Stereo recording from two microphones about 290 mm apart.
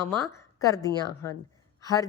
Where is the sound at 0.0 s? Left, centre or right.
Centre.